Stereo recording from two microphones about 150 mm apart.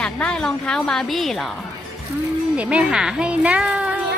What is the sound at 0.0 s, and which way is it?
A woman's voice, 5° left (ahead or behind).